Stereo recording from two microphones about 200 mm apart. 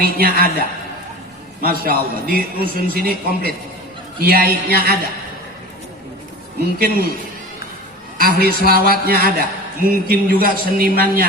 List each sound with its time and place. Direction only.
0.0 s a man's voice: 50° right (ahead or behind)
1.6 s a man's voice: 50° right (ahead or behind)
6.6 s a man's voice: 50° right (ahead or behind)
8.2 s a man's voice: 50° right (ahead or behind)